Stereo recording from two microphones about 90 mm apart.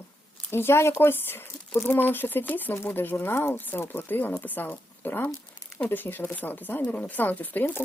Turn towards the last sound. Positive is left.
turn(degrees=20)  # may be behind; listen again after turning